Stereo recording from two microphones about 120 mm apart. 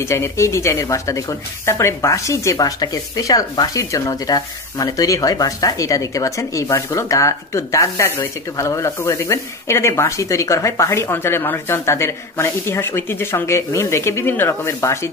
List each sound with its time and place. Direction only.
0.0 s speech: 25° left (ahead or behind)